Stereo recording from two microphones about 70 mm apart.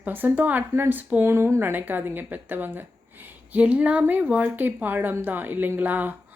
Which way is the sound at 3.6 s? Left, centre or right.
Centre.